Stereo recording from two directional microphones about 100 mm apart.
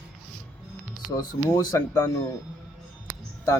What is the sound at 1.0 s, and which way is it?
A man's voice, 45° left (ahead or behind).